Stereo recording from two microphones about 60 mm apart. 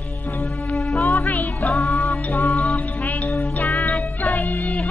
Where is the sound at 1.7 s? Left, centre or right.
Centre.